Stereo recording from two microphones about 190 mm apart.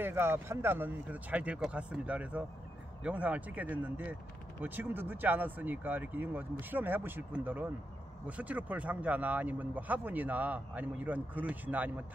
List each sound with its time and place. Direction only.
0.0 s speech: 10° right (ahead or behind)